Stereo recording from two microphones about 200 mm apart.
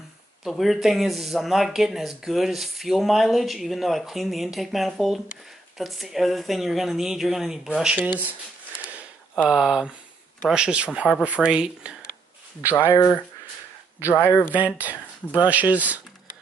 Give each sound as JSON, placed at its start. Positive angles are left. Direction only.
{"t": 0.4, "sound": "speech", "side_deg": 0}
{"t": 9.3, "sound": "speech", "side_deg": 0}
{"t": 14.0, "sound": "speech", "side_deg": 10}
{"t": 14.5, "sound": "speech", "side_deg": -10}